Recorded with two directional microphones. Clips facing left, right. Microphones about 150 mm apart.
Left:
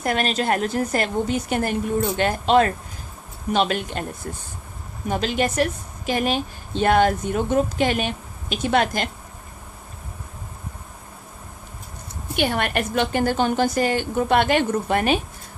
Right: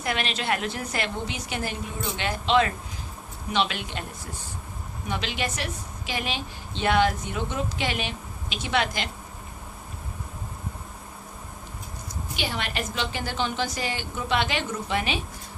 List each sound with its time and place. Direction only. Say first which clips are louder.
0.0 s a woman's voice: left 6 dB; 45° left (ahead or behind)
5.0 s a woman's voice: left 8 dB; 45° left (ahead or behind)
12.4 s a woman's voice: left 9 dB; 55° left (ahead or behind)